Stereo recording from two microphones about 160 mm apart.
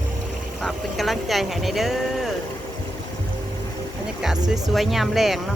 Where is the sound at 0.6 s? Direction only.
Centre (ahead or behind).